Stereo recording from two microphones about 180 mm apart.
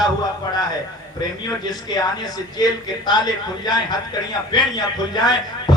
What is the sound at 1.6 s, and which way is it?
A man's voice, 20° left (ahead or behind).